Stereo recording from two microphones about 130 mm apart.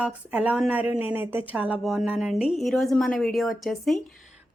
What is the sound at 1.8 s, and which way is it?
A woman's voice, centre (ahead or behind).